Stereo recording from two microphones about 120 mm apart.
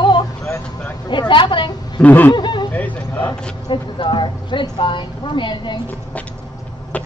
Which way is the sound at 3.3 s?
35° left (ahead or behind).